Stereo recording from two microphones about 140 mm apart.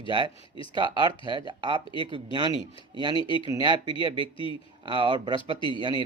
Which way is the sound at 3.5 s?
30° right (ahead or behind).